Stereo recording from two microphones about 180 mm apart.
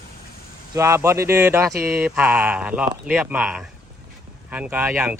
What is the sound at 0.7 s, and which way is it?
Speech, 15° right (ahead or behind).